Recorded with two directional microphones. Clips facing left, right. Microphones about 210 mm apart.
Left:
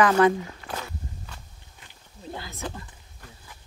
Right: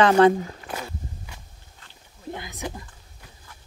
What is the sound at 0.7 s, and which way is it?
Walk, 10° right (ahead or behind).